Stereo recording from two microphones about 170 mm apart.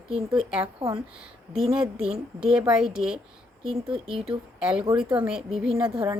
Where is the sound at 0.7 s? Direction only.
35° right (ahead or behind).